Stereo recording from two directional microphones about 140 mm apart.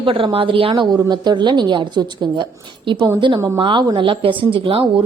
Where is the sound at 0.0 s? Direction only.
40° right (ahead or behind).